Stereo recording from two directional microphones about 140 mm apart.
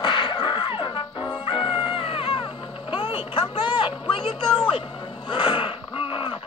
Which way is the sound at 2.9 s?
40° left (ahead or behind).